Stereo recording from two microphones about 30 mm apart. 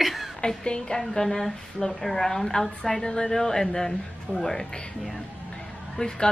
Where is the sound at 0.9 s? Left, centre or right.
Centre.